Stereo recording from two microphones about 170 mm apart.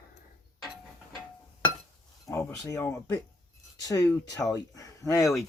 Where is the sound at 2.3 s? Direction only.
15° left (ahead or behind).